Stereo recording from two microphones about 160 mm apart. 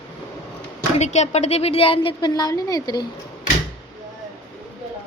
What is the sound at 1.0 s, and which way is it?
A woman's voice, 45° left (ahead or behind).